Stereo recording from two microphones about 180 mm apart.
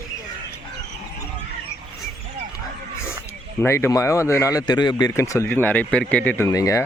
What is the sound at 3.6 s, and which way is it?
Speech, 15° left (ahead or behind).